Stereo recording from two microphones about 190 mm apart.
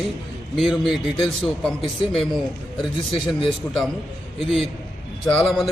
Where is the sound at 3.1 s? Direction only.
30° left (ahead or behind).